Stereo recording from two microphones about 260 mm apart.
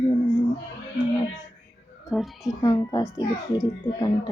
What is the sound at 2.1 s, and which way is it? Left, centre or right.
Speech, centre.